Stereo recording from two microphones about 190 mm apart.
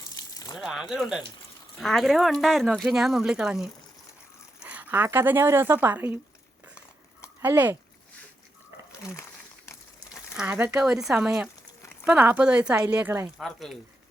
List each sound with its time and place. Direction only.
0.1 s a sound: 20° left (ahead or behind)
0.5 s speech: centre (ahead or behind)
7.4 s speech: 10° right (ahead or behind)
10.3 s speech: 5° right (ahead or behind)
13.4 s speech: centre (ahead or behind)